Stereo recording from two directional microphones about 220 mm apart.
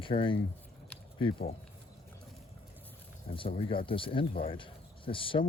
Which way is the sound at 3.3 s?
25° left (ahead or behind).